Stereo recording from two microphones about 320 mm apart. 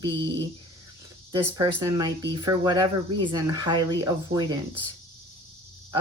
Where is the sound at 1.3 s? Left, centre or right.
Centre.